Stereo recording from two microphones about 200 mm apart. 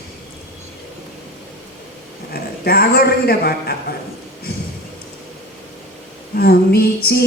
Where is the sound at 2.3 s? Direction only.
50° left (ahead or behind).